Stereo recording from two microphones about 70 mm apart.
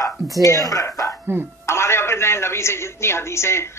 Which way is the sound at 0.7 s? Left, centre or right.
Left.